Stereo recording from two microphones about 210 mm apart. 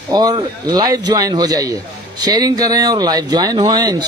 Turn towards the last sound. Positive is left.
turn(degrees=-20)  # may be behind; listen again after turning